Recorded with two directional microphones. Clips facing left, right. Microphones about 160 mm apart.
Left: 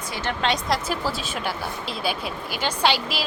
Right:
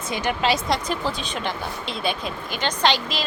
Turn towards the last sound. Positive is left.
turn(degrees=10)  # may be behind; listen again after turning